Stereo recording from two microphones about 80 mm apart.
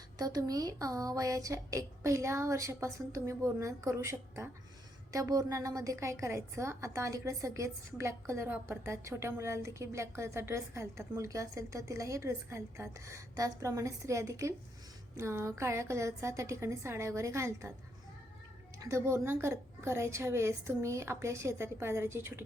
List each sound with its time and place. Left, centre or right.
0.2 s a woman's voice: right
5.1 s a woman's voice: right
18.8 s a woman's voice: right